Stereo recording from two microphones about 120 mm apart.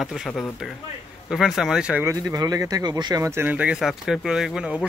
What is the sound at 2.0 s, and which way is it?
Speech, 25° right (ahead or behind).